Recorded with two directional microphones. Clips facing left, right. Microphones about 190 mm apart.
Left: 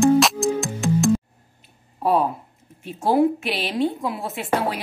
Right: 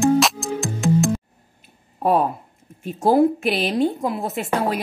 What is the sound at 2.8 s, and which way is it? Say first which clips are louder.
A woman's voice: right 2 dB; 45° right (ahead or behind).